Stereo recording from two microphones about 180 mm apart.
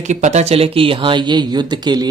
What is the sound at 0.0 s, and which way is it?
Speech, 40° right (ahead or behind).